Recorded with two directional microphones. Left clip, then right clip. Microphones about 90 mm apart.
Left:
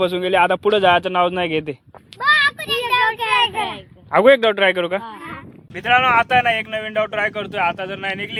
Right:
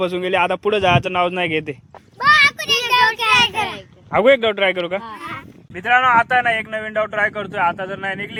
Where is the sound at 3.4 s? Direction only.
35° right (ahead or behind).